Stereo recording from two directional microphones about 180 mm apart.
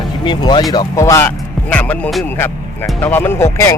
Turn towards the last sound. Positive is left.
turn(degrees=15)  # may be behind; listen again after turning